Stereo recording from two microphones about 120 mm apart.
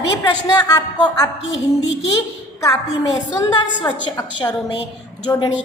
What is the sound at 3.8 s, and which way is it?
A woman's voice, 30° left (ahead or behind).